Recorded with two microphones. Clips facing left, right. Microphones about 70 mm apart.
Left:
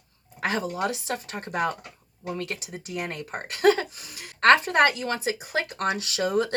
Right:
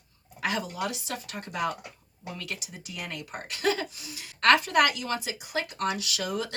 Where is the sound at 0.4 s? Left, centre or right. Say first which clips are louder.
Left 4 dB; left.